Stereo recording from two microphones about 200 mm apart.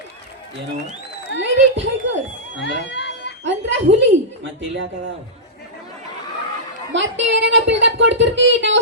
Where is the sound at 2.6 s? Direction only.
60° left (ahead or behind).